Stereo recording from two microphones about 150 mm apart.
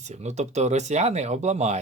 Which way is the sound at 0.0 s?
50° right (ahead or behind).